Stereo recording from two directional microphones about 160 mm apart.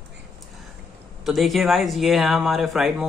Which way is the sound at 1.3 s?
Centre (ahead or behind).